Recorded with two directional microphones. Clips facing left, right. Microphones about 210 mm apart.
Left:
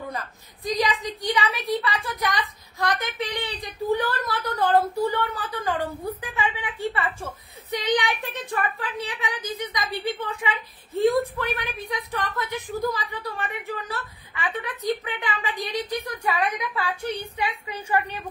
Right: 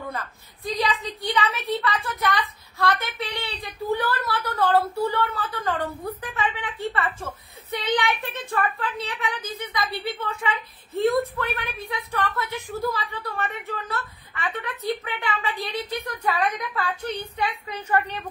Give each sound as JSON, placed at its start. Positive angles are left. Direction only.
{"t": 0.7, "sound": "a woman's voice", "side_deg": 15}